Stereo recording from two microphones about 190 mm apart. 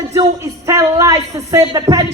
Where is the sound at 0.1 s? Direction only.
15° right (ahead or behind).